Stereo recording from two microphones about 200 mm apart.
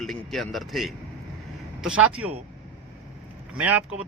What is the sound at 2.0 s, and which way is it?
Speech, 90° right.